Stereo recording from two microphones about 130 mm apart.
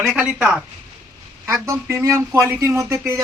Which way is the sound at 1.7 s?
20° right (ahead or behind).